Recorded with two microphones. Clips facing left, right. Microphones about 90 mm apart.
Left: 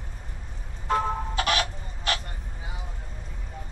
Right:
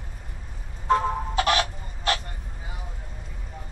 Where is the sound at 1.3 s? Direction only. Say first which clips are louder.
Right 4 dB; 40° right (ahead or behind).